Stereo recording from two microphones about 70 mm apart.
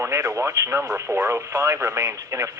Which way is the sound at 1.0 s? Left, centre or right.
Right.